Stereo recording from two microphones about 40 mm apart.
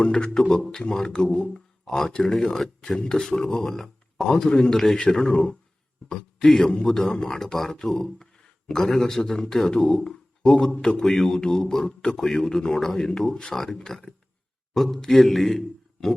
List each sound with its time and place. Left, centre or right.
0.3 s a man's voice: centre
2.4 s a man's voice: centre
4.3 s a man's voice: centre
4.7 s a man's voice: centre
4.9 s a man's voice: centre